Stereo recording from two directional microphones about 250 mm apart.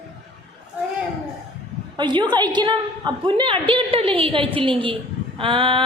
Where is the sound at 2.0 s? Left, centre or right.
Centre.